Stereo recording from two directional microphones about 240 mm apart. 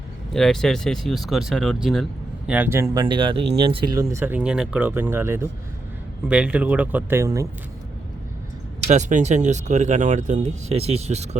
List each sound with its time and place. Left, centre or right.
0.3 s speech: centre
8.9 s speech: right